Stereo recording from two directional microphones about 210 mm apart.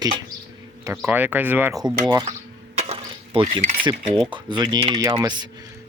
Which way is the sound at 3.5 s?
25° right (ahead or behind).